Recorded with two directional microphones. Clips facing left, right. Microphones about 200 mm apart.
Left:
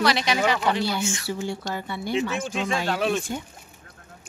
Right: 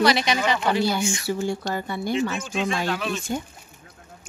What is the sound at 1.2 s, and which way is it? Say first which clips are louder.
A woman's voice: right 4 dB; 45° right (ahead or behind).